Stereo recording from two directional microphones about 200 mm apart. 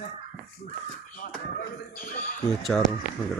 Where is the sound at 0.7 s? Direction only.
45° left (ahead or behind).